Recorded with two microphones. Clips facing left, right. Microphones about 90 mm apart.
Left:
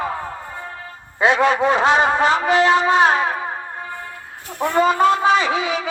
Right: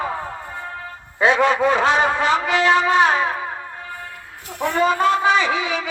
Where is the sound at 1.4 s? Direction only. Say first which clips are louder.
Left 2 dB; 20° left (ahead or behind).